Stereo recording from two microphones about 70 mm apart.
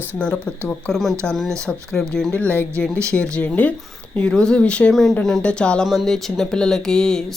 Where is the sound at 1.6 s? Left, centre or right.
Centre.